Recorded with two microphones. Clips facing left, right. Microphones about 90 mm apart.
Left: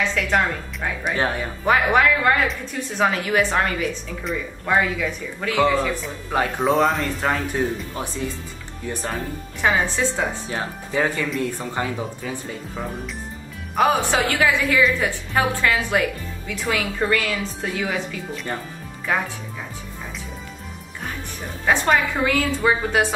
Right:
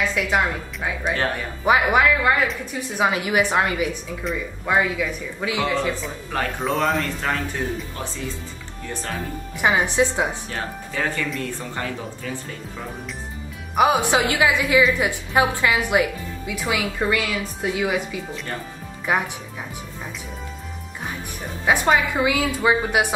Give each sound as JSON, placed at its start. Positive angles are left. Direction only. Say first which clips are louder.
{"t": 0.0, "sound": "a woman's voice", "louder": "even", "side_deg": -10}
{"t": 1.0, "sound": "speech", "louder": "left 1 dB", "side_deg": 15}
{"t": 1.6, "sound": "a woman's voice", "louder": "even", "side_deg": -15}
{"t": 4.2, "sound": "a woman's voice", "louder": "even", "side_deg": -5}
{"t": 6.6, "sound": "speech", "louder": "left 3 dB", "side_deg": 0}
{"t": 7.5, "sound": "speech", "louder": "left 3 dB", "side_deg": 15}
{"t": 9.6, "sound": "a woman's voice", "louder": "right 1 dB", "side_deg": -15}
{"t": 10.5, "sound": "speech", "louder": "left 3 dB", "side_deg": 15}
{"t": 13.7, "sound": "a woman's voice", "louder": "right 1 dB", "side_deg": -15}
{"t": 19.1, "sound": "a woman's voice", "louder": "right 1 dB", "side_deg": -15}
{"t": 21.6, "sound": "a woman's voice", "louder": "even", "side_deg": -10}